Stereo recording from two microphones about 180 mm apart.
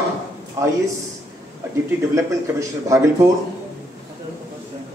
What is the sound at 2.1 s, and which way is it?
Speech, 20° right (ahead or behind).